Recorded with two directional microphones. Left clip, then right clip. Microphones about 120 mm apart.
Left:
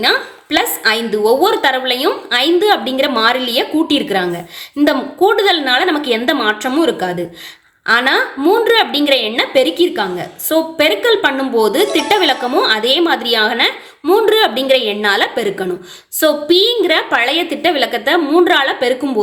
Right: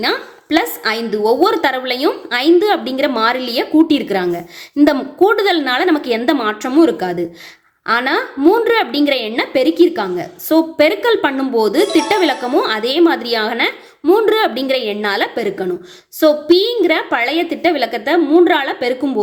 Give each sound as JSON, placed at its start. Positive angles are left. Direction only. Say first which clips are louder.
{"t": 0.0, "sound": "a woman's voice", "louder": "left 4 dB", "side_deg": -40}